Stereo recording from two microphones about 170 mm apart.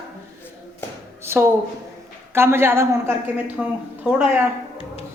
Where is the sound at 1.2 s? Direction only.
15° right (ahead or behind).